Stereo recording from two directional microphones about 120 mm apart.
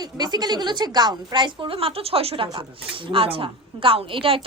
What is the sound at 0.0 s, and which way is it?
A woman's voice, 35° right (ahead or behind).